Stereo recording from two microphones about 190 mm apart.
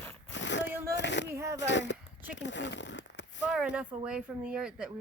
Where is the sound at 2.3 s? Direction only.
70° left (ahead or behind).